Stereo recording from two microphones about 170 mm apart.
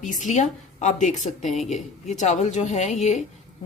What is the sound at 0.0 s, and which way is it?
A woman's voice, 50° left (ahead or behind).